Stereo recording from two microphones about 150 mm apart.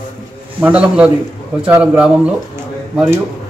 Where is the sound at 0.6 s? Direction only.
10° right (ahead or behind).